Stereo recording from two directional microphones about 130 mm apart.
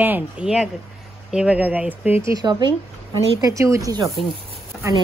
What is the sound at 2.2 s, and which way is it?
A woman's voice, 30° right (ahead or behind).